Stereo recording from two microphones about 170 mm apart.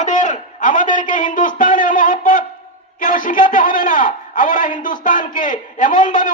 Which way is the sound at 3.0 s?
50° left (ahead or behind).